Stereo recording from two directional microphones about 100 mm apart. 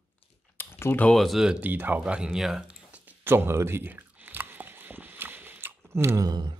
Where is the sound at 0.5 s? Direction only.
20° left (ahead or behind).